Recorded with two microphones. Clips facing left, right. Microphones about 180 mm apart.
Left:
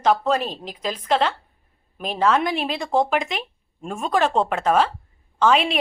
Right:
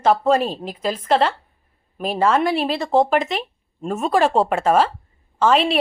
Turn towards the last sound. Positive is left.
turn(degrees=0)  # may be behind; listen again after turning